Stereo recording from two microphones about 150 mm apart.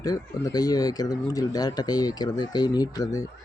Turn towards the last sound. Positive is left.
turn(degrees=25)  # may be behind; listen again after turning